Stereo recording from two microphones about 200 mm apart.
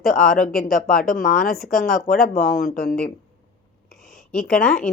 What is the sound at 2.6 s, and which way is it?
Speech, 50° left (ahead or behind).